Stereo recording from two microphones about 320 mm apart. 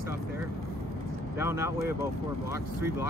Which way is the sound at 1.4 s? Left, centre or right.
Centre.